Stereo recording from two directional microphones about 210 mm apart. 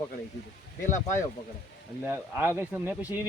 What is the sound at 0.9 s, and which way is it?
Speech, 35° left (ahead or behind).